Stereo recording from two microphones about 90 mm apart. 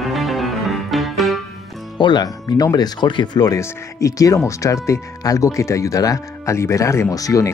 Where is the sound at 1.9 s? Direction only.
55° left (ahead or behind).